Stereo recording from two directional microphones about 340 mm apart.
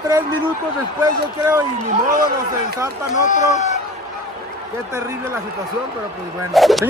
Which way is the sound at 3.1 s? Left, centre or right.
Left.